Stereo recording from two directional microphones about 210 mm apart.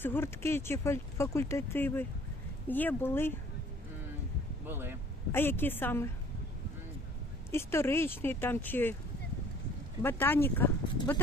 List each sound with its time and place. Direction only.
0.0 s speech: 10° left (ahead or behind)
4.7 s speech: 10° right (ahead or behind)
5.3 s speech: 10° left (ahead or behind)
7.5 s speech: 10° left (ahead or behind)
10.0 s speech: 10° left (ahead or behind)